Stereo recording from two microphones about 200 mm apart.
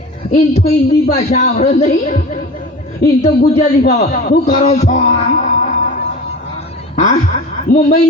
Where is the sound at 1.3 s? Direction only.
40° left (ahead or behind).